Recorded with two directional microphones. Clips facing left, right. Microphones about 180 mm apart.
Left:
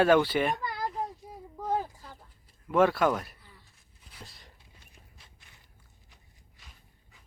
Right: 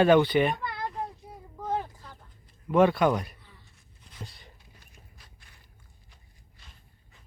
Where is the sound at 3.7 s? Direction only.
Centre (ahead or behind).